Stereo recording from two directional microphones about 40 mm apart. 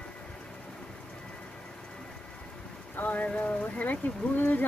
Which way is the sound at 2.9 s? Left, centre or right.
Left.